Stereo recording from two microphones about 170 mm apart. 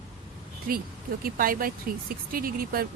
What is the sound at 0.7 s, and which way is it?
Speech, 55° right (ahead or behind).